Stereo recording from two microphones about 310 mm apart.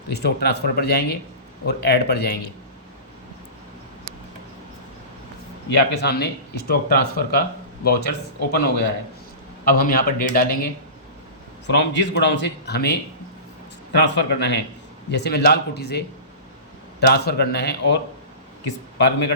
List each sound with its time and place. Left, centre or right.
0.1 s speech: left
5.6 s speech: left
11.7 s speech: left
14.0 s speech: left
18.9 s speech: left